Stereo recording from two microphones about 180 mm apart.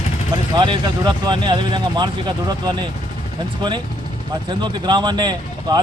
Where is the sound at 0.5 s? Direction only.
25° right (ahead or behind).